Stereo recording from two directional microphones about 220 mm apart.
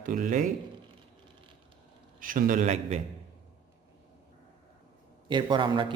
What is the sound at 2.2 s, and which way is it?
Speech, 40° right (ahead or behind).